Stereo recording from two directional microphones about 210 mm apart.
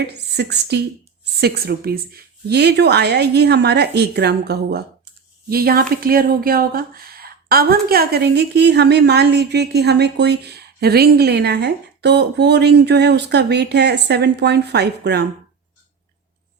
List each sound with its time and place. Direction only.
0.1 s a woman's voice: 50° right (ahead or behind)